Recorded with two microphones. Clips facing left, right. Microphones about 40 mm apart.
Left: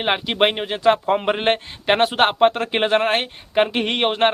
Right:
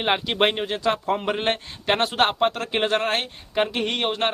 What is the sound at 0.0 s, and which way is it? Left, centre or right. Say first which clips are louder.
Speech: left 2 dB; centre.